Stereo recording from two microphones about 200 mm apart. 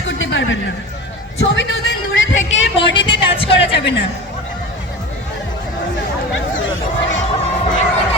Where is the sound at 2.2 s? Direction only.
70° left (ahead or behind).